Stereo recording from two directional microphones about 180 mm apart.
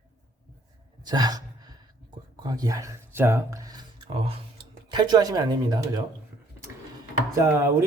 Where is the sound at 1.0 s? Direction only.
20° right (ahead or behind).